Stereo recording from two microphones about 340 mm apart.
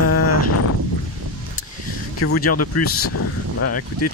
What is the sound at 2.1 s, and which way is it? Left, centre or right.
Speech, left.